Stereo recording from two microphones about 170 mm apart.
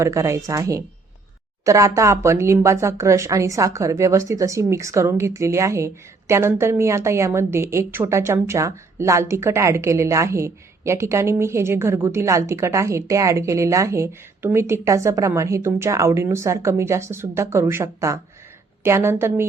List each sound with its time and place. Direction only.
0.0 s a woman's voice: 20° right (ahead or behind)